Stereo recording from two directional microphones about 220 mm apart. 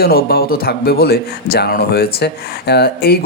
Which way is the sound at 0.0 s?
45° left (ahead or behind).